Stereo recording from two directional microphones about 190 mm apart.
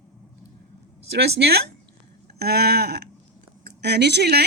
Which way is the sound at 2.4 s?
55° right (ahead or behind).